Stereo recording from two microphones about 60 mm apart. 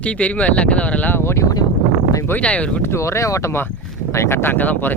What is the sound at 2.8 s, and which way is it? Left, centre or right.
Speech, left.